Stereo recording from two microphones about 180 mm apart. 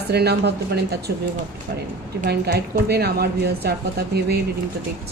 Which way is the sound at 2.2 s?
65° right (ahead or behind).